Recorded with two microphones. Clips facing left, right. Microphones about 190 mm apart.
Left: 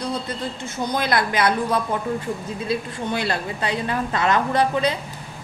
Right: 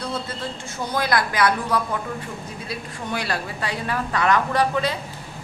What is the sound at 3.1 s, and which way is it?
A woman's voice, 25° left (ahead or behind).